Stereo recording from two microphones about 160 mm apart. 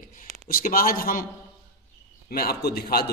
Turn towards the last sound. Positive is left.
turn(degrees=75)  # may be behind; listen again after turning